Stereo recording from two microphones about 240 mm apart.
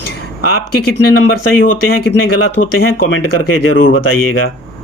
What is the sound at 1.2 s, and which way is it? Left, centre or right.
Speech, left.